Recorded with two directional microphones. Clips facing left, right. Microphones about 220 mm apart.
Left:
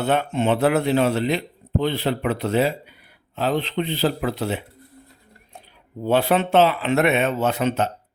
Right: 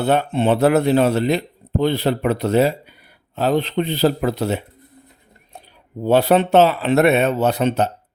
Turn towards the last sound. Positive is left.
turn(degrees=-35)  # may be behind; listen again after turning